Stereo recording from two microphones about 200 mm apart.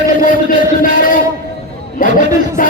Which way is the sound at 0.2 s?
45° left (ahead or behind).